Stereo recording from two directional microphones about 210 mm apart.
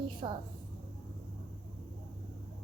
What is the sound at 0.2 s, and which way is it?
Speech, 20° right (ahead or behind).